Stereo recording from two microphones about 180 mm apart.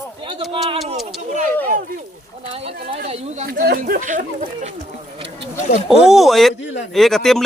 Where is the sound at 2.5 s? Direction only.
35° right (ahead or behind).